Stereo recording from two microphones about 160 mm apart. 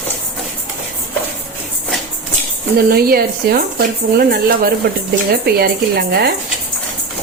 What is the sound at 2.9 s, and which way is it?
Speech, 70° right (ahead or behind).